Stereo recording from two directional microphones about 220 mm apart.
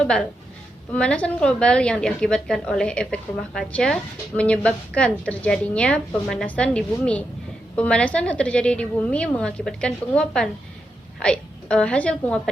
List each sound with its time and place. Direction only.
0.0 s a woman's voice: 5° left (ahead or behind)